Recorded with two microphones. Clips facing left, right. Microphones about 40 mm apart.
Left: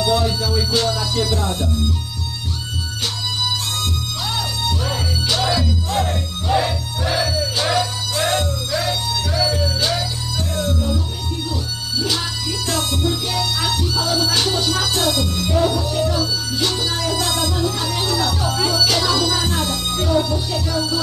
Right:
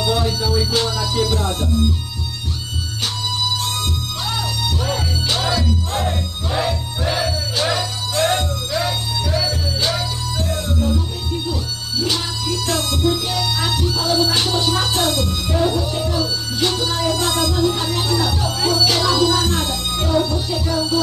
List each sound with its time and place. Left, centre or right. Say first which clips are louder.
0.0 s music: left 1 dB; centre
1.3 s music: even; right
4.3 s music: even; centre
13.7 s music: right 1 dB; centre
14.7 s music: right 1 dB; right
15.1 s music: left 1 dB; centre
15.7 s music: even; right
16.0 s music: left 1 dB; centre
17.6 s music: right 2 dB; right
18.0 s music: left 1 dB; centre
18.9 s music: right 1 dB; right
19.6 s music: even; centre